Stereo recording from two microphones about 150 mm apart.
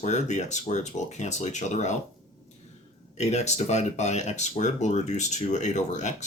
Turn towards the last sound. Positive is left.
turn(degrees=50)  # may be behind; listen again after turning